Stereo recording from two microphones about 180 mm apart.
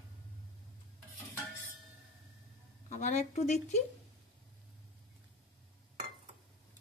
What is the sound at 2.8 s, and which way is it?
Speech, 40° left (ahead or behind).